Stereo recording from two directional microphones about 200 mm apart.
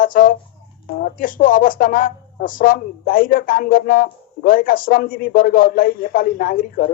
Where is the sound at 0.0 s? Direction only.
45° left (ahead or behind).